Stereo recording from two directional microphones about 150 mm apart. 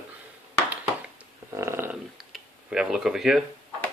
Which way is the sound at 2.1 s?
5° right (ahead or behind).